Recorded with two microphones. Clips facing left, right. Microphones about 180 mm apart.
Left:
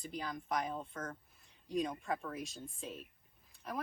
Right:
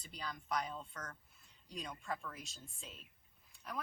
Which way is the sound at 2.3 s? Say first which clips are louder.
Left 10 dB; 50° left (ahead or behind).